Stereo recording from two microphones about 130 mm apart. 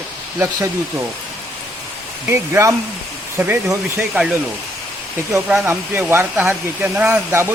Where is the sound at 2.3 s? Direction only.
20° right (ahead or behind).